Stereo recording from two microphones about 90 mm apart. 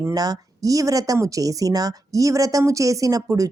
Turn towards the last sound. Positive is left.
turn(degrees=-40)  # may be behind; listen again after turning